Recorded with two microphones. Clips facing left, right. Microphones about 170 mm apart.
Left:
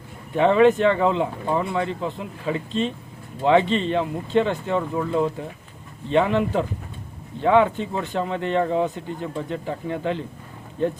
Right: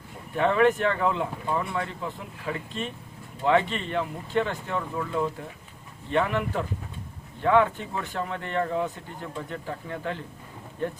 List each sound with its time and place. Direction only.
0.3 s speech: 20° left (ahead or behind)